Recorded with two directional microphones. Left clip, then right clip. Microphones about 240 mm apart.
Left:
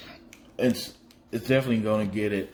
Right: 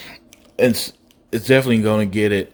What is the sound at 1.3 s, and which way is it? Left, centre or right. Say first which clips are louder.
A man's voice: right 9 dB; right.